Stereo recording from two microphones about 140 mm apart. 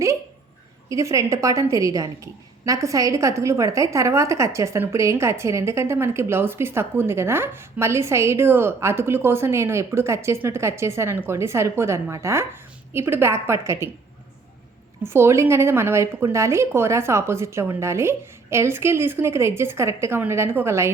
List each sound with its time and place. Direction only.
0.9 s a woman's voice: 20° right (ahead or behind)
15.0 s a woman's voice: 15° right (ahead or behind)